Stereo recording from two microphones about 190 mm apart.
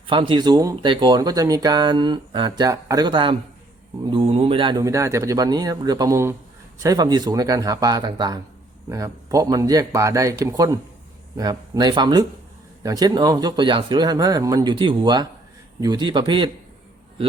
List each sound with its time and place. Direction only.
0.1 s speech: 25° right (ahead or behind)